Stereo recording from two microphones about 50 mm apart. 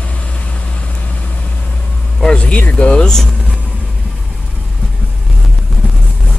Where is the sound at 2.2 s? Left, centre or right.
Left.